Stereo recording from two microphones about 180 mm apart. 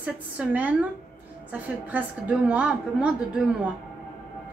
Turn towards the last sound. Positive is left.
turn(degrees=-5)  # may be behind; listen again after turning